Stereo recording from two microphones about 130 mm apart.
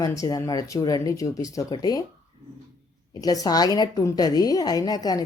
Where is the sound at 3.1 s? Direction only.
30° left (ahead or behind).